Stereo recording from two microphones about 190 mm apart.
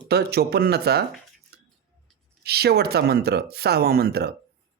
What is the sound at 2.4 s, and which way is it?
Speech, 55° right (ahead or behind).